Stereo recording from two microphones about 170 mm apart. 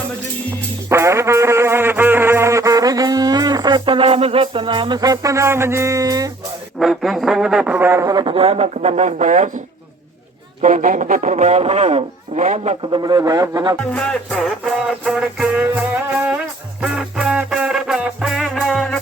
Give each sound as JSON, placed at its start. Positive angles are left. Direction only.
{"t": 0.9, "sound": "music", "side_deg": -15}
{"t": 6.7, "sound": "speech", "side_deg": 0}
{"t": 10.6, "sound": "speech", "side_deg": -45}
{"t": 12.9, "sound": "speech", "side_deg": -25}
{"t": 13.9, "sound": "music", "side_deg": 5}